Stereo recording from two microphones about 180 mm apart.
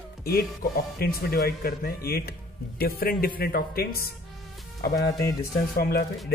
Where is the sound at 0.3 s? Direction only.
55° left (ahead or behind).